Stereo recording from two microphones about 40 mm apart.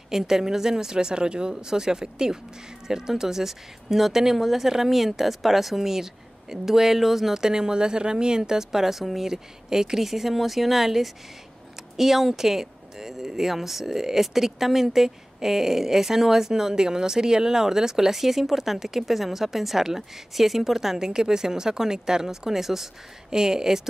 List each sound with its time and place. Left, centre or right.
0.1 s speech: centre